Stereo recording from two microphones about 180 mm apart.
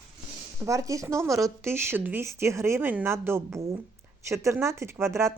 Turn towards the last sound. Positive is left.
turn(degrees=-15)  # may be behind; listen again after turning